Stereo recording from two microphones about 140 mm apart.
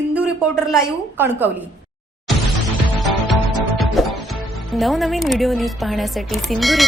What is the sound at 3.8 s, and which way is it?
Speech, centre (ahead or behind).